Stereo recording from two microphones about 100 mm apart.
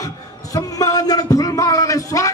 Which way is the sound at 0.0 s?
35° left (ahead or behind).